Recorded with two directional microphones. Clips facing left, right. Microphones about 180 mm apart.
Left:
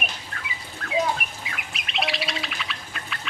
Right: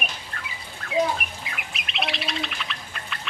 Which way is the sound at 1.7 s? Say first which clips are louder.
Left 2 dB; centre (ahead or behind).